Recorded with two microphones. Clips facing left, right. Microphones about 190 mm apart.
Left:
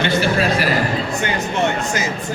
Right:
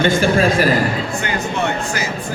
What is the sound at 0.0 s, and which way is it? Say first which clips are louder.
Speech: right 3 dB; 45° right (ahead or behind).